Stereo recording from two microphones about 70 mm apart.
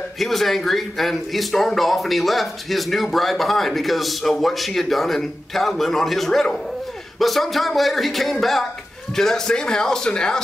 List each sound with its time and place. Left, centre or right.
0.2 s a man's voice: centre